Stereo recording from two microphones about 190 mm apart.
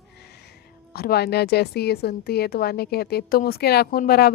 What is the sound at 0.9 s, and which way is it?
A woman's voice, 55° left (ahead or behind).